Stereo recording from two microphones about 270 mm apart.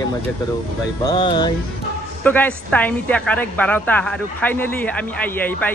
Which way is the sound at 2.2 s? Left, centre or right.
Centre.